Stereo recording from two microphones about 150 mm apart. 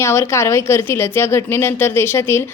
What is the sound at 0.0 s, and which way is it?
A woman's voice, 15° left (ahead or behind).